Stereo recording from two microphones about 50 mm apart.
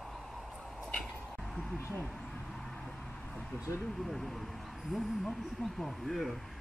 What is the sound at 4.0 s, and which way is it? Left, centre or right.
Speech, centre.